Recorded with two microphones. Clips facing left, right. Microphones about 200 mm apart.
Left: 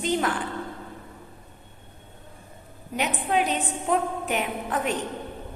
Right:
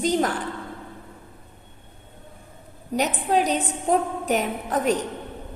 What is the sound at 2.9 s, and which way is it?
A woman's voice, 40° right (ahead or behind).